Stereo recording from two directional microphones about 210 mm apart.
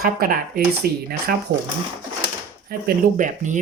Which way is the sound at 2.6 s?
40° right (ahead or behind).